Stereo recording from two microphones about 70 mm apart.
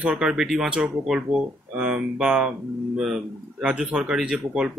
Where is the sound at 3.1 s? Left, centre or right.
Centre.